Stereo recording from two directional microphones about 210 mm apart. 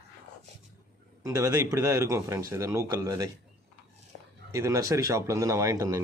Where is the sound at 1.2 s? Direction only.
15° right (ahead or behind).